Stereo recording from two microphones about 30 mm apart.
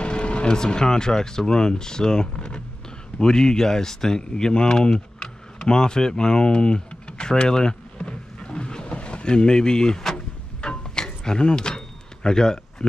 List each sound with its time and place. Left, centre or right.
0.0 s speech: left
8.8 s vehicle: left
10.1 s a sound: left
11.2 s power windows: left